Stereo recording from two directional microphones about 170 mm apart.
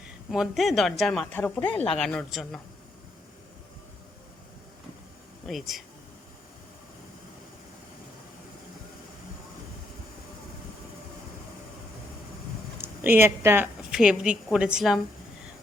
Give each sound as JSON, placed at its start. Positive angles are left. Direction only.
{"t": 0.3, "sound": "speech", "side_deg": 0}
{"t": 5.5, "sound": "speech", "side_deg": 0}
{"t": 12.8, "sound": "a woman's voice", "side_deg": -10}